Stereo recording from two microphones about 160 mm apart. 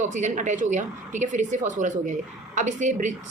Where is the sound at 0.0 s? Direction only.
50° right (ahead or behind).